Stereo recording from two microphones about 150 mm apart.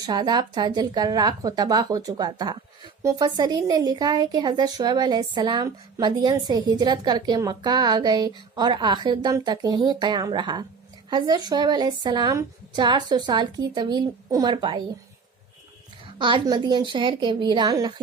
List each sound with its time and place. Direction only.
0.0 s speech: 30° right (ahead or behind)
16.1 s a woman's voice: 30° right (ahead or behind)